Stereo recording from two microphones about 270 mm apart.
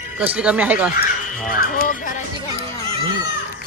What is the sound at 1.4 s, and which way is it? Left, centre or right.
Speech, left.